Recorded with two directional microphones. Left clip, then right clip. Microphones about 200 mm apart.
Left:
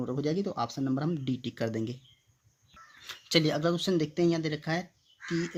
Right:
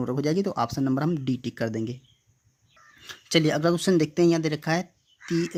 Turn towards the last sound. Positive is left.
turn(degrees=-35)  # may be behind; listen again after turning